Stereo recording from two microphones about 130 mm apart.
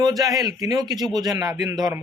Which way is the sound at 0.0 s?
30° right (ahead or behind).